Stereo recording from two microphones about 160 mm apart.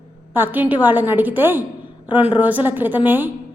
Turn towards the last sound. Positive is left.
turn(degrees=-10)  # may be behind; listen again after turning